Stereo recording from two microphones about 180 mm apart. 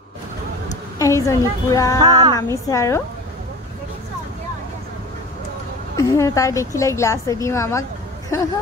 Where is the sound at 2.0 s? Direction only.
20° right (ahead or behind).